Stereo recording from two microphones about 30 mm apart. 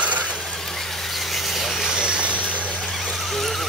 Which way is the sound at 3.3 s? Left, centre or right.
Centre.